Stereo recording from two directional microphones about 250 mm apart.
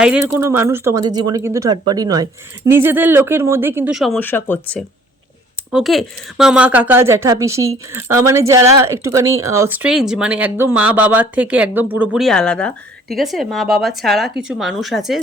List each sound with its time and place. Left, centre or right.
0.0 s a woman's voice: centre